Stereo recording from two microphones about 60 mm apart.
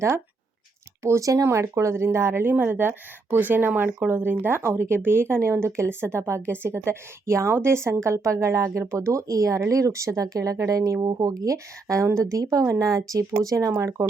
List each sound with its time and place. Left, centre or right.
1.0 s a woman's voice: right
11.0 s speech: right
14.0 s speech: right